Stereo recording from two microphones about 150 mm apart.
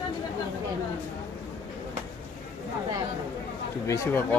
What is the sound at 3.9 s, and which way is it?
Speech, 20° left (ahead or behind).